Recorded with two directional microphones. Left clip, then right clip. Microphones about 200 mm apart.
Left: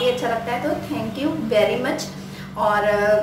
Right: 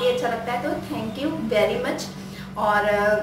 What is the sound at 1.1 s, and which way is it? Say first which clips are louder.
A woman's voice: left 3 dB; centre (ahead or behind).